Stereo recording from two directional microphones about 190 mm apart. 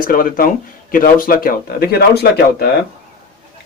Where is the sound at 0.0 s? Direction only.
45° left (ahead or behind).